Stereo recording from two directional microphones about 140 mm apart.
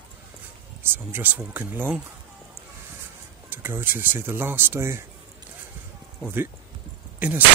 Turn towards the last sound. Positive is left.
turn(degrees=-10)  # may be behind; listen again after turning